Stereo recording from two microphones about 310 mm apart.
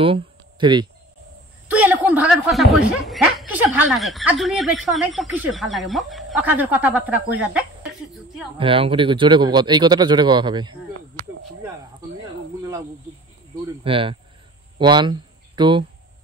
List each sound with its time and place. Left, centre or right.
0.0 s a sound: centre
1.7 s speech: centre
8.5 s a man's voice: centre
13.8 s a man's voice: centre